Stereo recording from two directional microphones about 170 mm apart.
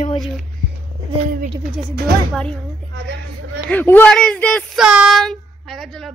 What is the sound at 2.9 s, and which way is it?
Speech, 85° right.